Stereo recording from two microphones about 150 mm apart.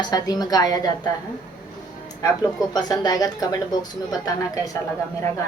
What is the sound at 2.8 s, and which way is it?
A woman's voice, 25° left (ahead or behind).